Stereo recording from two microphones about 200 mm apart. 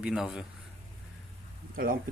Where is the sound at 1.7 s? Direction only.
45° right (ahead or behind).